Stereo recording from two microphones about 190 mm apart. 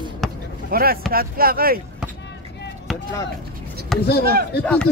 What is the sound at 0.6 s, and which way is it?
Speech, 50° right (ahead or behind).